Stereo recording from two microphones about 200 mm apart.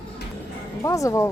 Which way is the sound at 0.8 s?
15° left (ahead or behind).